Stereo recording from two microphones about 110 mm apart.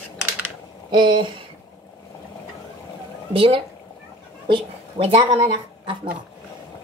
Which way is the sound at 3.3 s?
55° right (ahead or behind).